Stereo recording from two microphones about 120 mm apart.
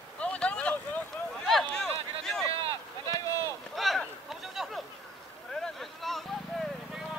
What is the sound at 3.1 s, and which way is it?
Run, 30° left (ahead or behind).